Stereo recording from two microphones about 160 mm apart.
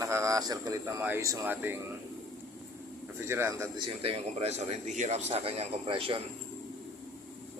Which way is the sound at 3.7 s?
35° right (ahead or behind).